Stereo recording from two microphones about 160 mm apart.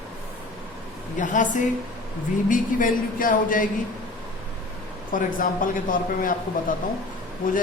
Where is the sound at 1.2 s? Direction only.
55° left (ahead or behind).